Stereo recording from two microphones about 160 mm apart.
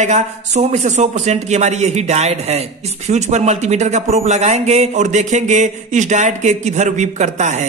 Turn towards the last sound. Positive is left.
turn(degrees=-45)  # may be behind; listen again after turning